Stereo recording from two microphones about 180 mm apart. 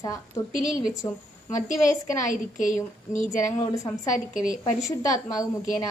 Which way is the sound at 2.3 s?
45° left (ahead or behind).